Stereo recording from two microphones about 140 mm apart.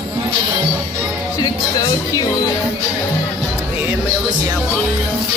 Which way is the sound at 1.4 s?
25° left (ahead or behind).